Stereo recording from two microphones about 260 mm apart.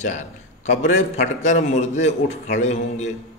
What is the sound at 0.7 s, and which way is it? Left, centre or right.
A man's voice, left.